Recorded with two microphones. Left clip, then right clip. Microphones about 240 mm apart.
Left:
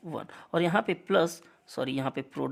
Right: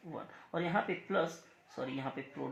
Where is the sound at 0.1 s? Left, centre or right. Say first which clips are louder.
Left 9 dB; left.